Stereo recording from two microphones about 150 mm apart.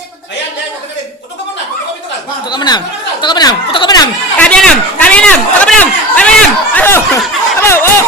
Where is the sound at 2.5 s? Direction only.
30° left (ahead or behind).